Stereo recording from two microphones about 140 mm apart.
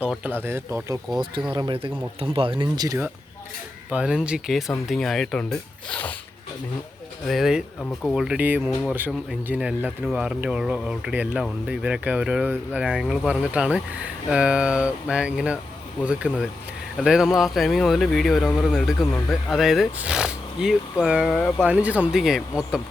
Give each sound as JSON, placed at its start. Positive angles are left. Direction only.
{"t": 0.0, "sound": "speech", "side_deg": -10}
{"t": 1.5, "sound": "speech", "side_deg": -35}
{"t": 3.8, "sound": "speech", "side_deg": -5}
{"t": 7.3, "sound": "speech", "side_deg": 0}
{"t": 7.8, "sound": "speech", "side_deg": 10}
{"t": 8.1, "sound": "speech", "side_deg": -5}
{"t": 21.6, "sound": "speech", "side_deg": -10}